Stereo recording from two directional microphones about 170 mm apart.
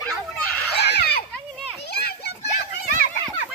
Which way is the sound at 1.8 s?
70° left (ahead or behind).